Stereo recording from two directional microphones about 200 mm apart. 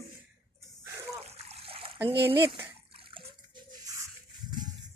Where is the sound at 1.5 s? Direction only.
30° right (ahead or behind).